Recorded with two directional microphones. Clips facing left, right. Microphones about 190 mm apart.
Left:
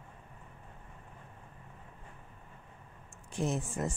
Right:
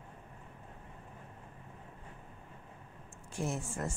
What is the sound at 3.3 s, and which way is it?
Speech, 20° left (ahead or behind).